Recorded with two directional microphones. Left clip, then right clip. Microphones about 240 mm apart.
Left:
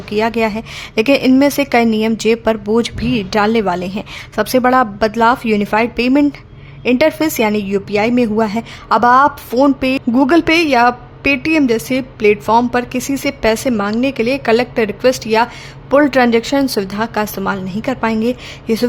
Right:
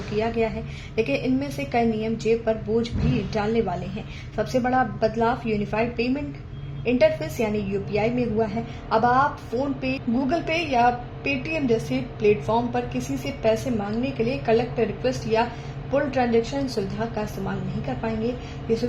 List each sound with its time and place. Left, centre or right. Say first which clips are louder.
0.2 s a woman's voice: left 9 dB; left